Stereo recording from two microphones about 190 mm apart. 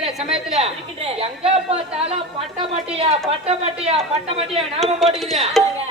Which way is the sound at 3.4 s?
30° right (ahead or behind).